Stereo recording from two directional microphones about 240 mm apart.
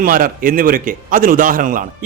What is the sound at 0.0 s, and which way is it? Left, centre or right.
A man's voice, right.